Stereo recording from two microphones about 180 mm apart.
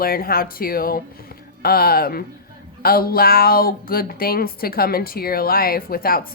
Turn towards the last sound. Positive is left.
turn(degrees=55)  # may be behind; listen again after turning